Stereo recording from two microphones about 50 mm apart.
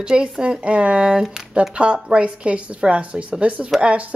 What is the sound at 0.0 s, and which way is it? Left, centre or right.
A woman's voice, centre.